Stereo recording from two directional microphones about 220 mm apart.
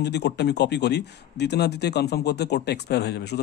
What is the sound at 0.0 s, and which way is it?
Speech, 50° left (ahead or behind).